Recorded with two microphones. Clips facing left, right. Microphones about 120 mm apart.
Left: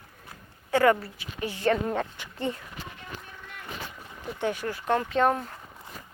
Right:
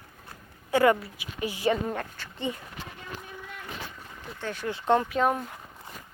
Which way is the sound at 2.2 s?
15° left (ahead or behind).